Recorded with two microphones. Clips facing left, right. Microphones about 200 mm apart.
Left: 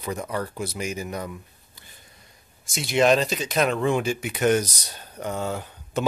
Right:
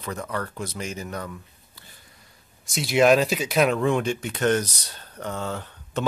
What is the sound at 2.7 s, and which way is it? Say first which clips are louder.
Speech: right 2 dB; centre (ahead or behind).